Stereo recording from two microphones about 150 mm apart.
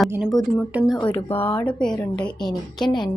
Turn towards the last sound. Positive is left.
turn(degrees=30)  # may be behind; listen again after turning